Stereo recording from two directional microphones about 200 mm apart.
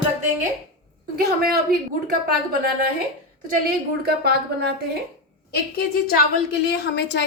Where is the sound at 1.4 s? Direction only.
50° right (ahead or behind).